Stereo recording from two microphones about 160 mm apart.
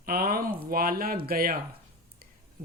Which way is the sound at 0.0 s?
70° right (ahead or behind).